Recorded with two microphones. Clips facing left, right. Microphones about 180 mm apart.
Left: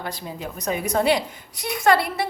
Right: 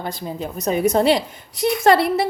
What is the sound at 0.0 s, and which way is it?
A woman's voice, 25° right (ahead or behind).